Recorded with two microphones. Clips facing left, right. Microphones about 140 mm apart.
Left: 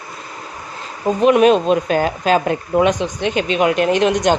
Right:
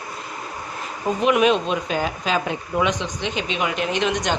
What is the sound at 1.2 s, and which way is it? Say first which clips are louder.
Speech: left 7 dB; 40° left (ahead or behind).